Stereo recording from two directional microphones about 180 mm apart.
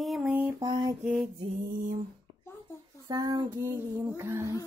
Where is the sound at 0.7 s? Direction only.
25° right (ahead or behind).